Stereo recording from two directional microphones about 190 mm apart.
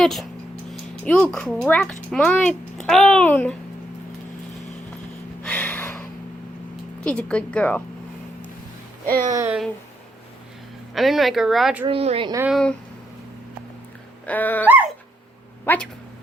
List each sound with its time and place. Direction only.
0.0 s speech: centre (ahead or behind)
5.4 s a sound: 10° left (ahead or behind)
7.0 s speech: 5° left (ahead or behind)
9.0 s speech: 50° right (ahead or behind)
9.3 s speech: 15° right (ahead or behind)
10.9 s speech: centre (ahead or behind)
11.9 s speech: 30° right (ahead or behind)
12.5 s speech: centre (ahead or behind)
14.3 s dog: 10° left (ahead or behind)